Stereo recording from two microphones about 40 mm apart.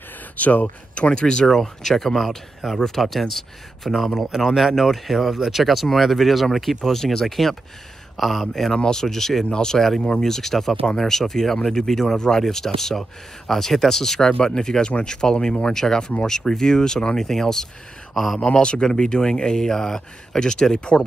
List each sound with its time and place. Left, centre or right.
0.4 s speech: left
1.2 s speech: centre
2.6 s speech: centre
3.0 s speech: centre
8.7 s speech: centre
9.8 s speech: centre
18.4 s speech: left